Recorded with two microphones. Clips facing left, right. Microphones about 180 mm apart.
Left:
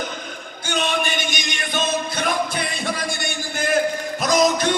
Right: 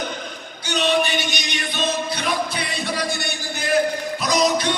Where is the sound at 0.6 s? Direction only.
50° left (ahead or behind).